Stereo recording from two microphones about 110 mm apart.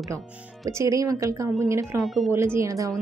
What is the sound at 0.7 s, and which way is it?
A woman's voice, 25° right (ahead or behind).